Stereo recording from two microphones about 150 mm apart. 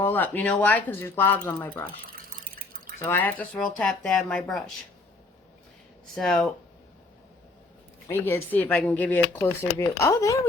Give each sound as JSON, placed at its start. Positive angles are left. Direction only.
{"t": 0.0, "sound": "speech", "side_deg": 10}
{"t": 2.0, "sound": "water", "side_deg": -75}
{"t": 3.0, "sound": "speech", "side_deg": 15}
{"t": 6.1, "sound": "speech", "side_deg": 0}
{"t": 8.2, "sound": "speech", "side_deg": 10}